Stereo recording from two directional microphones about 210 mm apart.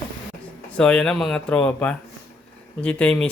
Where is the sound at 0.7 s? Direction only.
5° left (ahead or behind).